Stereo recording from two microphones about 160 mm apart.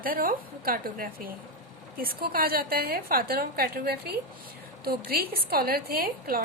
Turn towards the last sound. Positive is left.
turn(degrees=-65)  # may be behind; listen again after turning